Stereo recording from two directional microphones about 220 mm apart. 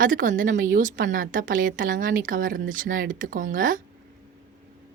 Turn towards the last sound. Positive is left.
turn(degrees=-40)  # may be behind; listen again after turning